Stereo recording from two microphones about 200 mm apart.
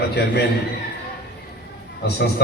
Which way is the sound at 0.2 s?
55° left (ahead or behind).